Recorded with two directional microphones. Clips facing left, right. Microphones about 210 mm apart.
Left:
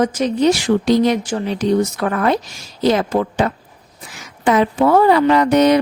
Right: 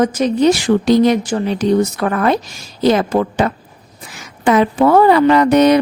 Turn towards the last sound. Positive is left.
turn(degrees=-60)  # may be behind; listen again after turning